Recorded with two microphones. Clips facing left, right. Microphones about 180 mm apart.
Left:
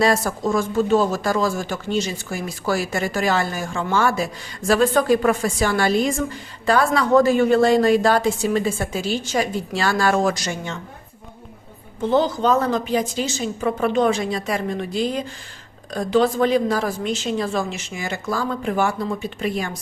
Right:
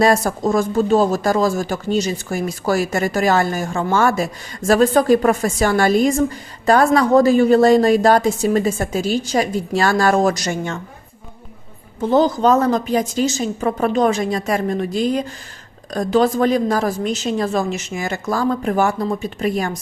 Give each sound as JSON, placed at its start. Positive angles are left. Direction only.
{"t": 0.0, "sound": "speech", "side_deg": -45}
{"t": 12.1, "sound": "a woman's voice", "side_deg": -40}